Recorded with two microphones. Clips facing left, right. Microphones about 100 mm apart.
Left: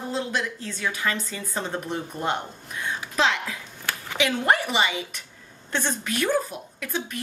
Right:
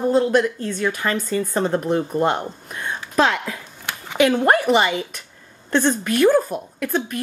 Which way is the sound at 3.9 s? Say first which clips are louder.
Even; 20° right (ahead or behind).